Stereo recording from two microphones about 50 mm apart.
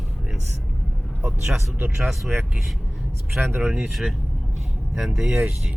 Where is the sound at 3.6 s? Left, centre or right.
Right.